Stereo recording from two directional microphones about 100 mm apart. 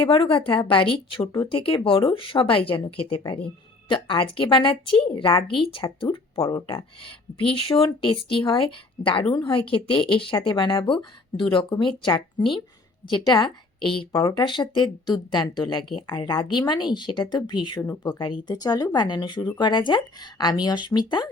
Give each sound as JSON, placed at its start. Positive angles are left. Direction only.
{"t": 0.1, "sound": "a woman's voice", "side_deg": 60}
{"t": 14.1, "sound": "speech", "side_deg": 40}